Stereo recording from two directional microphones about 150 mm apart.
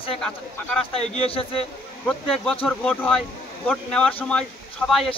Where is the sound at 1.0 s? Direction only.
40° left (ahead or behind).